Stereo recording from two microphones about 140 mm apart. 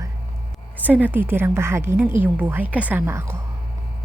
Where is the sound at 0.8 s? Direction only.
10° right (ahead or behind).